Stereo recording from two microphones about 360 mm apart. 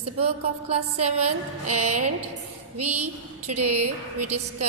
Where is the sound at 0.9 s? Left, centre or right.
Right.